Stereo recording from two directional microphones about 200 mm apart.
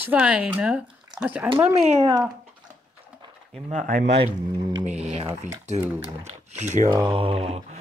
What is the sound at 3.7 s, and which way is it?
Speech, 40° right (ahead or behind).